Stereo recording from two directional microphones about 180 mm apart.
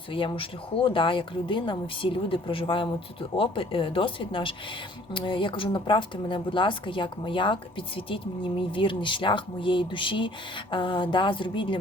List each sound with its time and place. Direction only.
0.1 s speech: 30° left (ahead or behind)